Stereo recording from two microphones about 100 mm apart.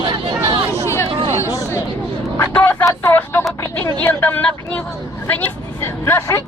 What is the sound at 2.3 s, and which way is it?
Speech, 20° left (ahead or behind).